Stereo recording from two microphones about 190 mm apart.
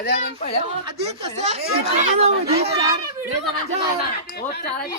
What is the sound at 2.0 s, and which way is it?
Speech, 35° right (ahead or behind).